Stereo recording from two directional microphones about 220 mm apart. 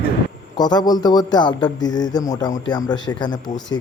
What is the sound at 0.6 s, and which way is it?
A man's voice, 20° left (ahead or behind).